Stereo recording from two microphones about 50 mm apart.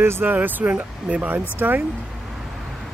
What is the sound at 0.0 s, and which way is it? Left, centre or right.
Speech, right.